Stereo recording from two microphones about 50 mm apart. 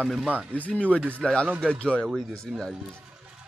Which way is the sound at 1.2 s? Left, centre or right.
Left.